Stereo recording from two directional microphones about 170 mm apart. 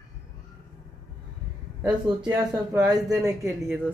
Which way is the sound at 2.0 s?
20° right (ahead or behind).